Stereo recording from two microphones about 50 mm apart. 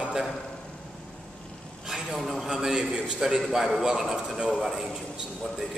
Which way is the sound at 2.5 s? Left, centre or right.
Centre.